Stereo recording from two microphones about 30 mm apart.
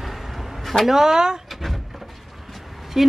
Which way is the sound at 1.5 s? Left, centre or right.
Centre.